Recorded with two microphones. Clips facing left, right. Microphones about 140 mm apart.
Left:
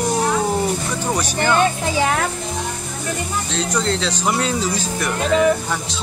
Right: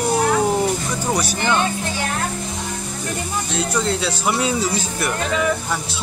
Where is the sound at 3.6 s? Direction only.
10° right (ahead or behind).